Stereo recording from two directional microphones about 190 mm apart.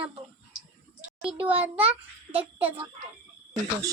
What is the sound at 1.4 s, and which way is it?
A child's voice, 30° right (ahead or behind).